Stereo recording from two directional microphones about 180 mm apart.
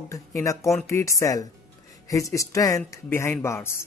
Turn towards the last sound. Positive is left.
turn(degrees=15)  # may be behind; listen again after turning